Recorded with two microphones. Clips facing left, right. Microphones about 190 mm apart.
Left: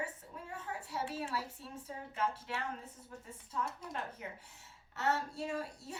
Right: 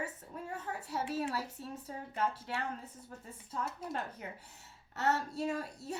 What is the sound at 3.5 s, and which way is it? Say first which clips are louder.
A child's voice: right 2 dB; 40° right (ahead or behind).